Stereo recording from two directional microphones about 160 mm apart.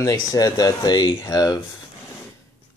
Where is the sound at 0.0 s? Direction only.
20° left (ahead or behind).